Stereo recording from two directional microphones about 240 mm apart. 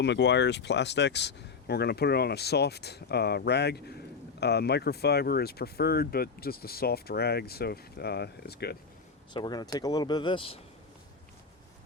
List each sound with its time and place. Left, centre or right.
0.0 s speech: left
9.3 s speech: centre